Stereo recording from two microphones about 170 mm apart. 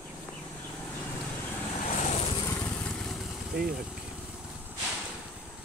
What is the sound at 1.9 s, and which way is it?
Vehicle, 40° left (ahead or behind).